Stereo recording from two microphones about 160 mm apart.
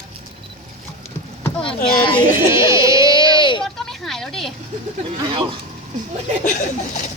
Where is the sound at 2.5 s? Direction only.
20° right (ahead or behind).